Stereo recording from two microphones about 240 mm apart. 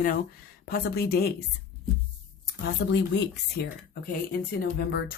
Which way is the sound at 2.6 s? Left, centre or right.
Left.